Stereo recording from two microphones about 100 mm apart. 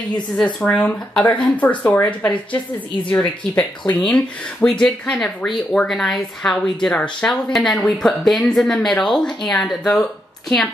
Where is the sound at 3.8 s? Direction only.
10° left (ahead or behind).